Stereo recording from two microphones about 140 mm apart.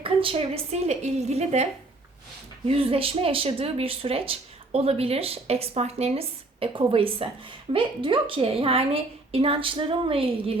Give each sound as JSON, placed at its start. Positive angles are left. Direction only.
{"t": 0.0, "sound": "speech", "side_deg": -40}
{"t": 2.6, "sound": "a woman's voice", "side_deg": -45}